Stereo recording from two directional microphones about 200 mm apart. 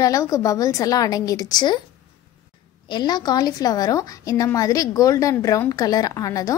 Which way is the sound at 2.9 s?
20° left (ahead or behind).